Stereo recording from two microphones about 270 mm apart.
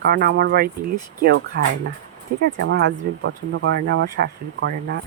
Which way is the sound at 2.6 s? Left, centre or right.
Right.